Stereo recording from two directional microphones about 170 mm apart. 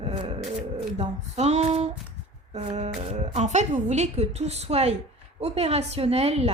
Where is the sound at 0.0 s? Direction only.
40° right (ahead or behind).